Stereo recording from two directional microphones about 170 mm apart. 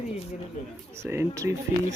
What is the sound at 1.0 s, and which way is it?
Speech, 15° right (ahead or behind).